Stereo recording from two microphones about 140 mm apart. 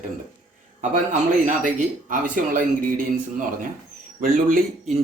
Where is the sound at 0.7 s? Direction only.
60° right (ahead or behind).